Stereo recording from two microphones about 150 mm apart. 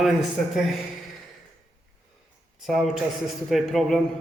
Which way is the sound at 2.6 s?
Centre (ahead or behind).